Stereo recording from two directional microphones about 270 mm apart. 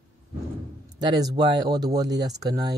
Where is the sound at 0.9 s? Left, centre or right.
Centre.